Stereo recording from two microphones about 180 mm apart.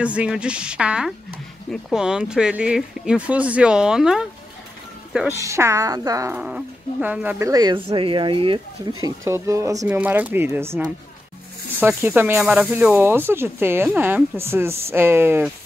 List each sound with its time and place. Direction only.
0.0 s speech: 5° right (ahead or behind)
5.4 s speech: 15° right (ahead or behind)
9.0 s speech: 15° right (ahead or behind)